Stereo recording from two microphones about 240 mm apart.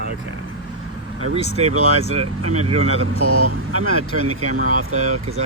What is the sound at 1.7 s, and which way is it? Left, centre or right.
Speech, right.